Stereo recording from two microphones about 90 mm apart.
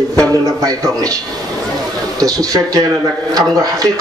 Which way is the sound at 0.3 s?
40° right (ahead or behind).